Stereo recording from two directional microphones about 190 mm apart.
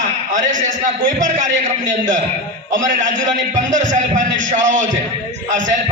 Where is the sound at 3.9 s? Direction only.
40° right (ahead or behind).